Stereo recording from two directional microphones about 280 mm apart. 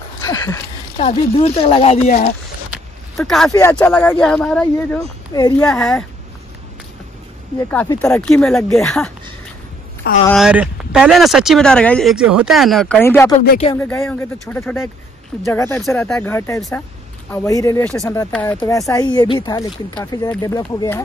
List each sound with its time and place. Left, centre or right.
0.2 s a sound: centre
1.0 s speech: left
2.7 s speech: centre
7.5 s speech: centre
10.2 s speech: centre
13.4 s a sound: left
13.7 s speech: centre